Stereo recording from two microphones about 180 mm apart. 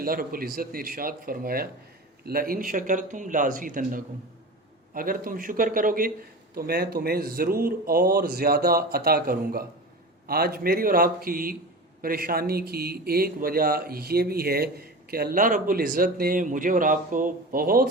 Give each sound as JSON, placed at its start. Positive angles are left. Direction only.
{"t": 0.0, "sound": "a man's voice", "side_deg": -55}